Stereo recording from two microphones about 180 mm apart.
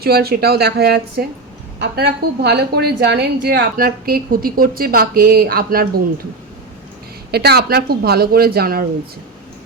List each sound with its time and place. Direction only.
0.0 s a woman's voice: 60° right (ahead or behind)
7.3 s a woman's voice: 60° right (ahead or behind)